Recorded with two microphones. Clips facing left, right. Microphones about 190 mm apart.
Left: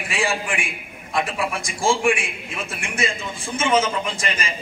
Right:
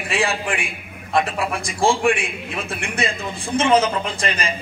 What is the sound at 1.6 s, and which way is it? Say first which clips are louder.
Speech: right 3 dB; 60° right (ahead or behind).